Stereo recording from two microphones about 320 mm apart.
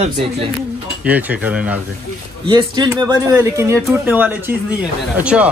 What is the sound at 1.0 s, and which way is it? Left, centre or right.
Speech, centre.